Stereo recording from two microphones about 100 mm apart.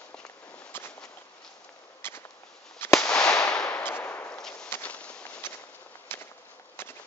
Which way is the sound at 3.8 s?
20° left (ahead or behind).